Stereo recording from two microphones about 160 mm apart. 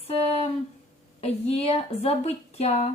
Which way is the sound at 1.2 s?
40° left (ahead or behind).